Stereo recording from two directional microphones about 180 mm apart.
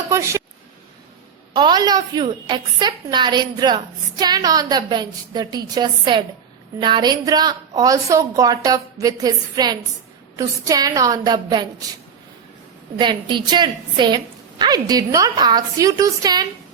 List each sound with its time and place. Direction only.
0.1 s a sound: 15° right (ahead or behind)
1.5 s a woman's voice: 25° right (ahead or behind)
13.0 s a woman's voice: 25° right (ahead or behind)